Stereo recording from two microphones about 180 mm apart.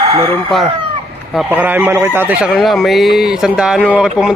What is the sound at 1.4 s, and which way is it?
A man's voice, 10° right (ahead or behind).